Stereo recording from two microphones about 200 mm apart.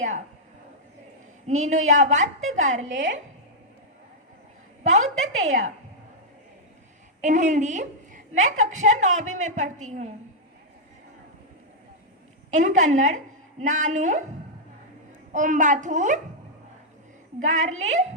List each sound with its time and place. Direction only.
1.5 s a woman's voice: 35° right (ahead or behind)
2.8 s a woman's voice: 65° right (ahead or behind)
4.8 s a woman's voice: 35° right (ahead or behind)
7.2 s a woman's voice: 40° right (ahead or behind)
12.5 s a woman's voice: 40° right (ahead or behind)
15.3 s a woman's voice: 40° right (ahead or behind)
17.4 s a woman's voice: 35° right (ahead or behind)